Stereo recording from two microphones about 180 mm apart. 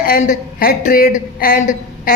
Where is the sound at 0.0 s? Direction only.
55° left (ahead or behind).